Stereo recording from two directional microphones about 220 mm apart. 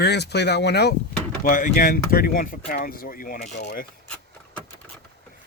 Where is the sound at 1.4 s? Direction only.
40° left (ahead or behind).